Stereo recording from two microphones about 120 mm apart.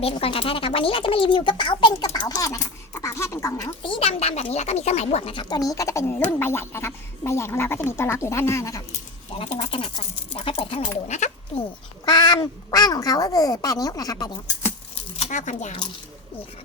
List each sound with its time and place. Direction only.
0.0 s speech: 50° left (ahead or behind)
2.1 s speech: 30° left (ahead or behind)
3.8 s speech: 50° left (ahead or behind)
5.3 s speech: 40° left (ahead or behind)
9.7 s speech: 50° left (ahead or behind)
12.0 s speech: 35° left (ahead or behind)
15.1 s speech: 75° left (ahead or behind)